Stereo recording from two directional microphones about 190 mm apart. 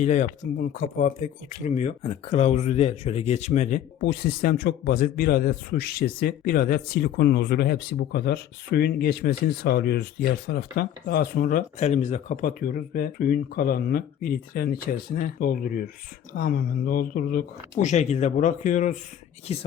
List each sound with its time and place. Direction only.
0.0 s speech: 40° left (ahead or behind)